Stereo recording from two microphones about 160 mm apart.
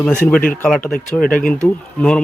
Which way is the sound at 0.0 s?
10° left (ahead or behind).